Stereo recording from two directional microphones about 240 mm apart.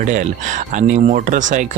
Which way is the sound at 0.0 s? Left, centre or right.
Right.